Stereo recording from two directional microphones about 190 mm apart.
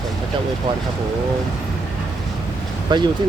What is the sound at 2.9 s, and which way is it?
Speech, 25° right (ahead or behind).